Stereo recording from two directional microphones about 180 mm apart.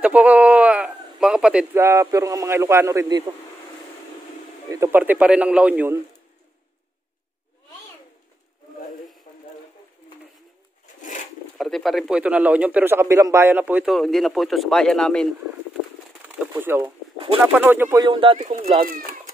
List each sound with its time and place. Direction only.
0.0 s speech: 10° right (ahead or behind)
4.6 s a man's voice: 15° right (ahead or behind)
11.0 s a sound: 45° left (ahead or behind)
11.5 s speech: centre (ahead or behind)
16.3 s a man's voice: 10° right (ahead or behind)
18.0 s speech: 30° right (ahead or behind)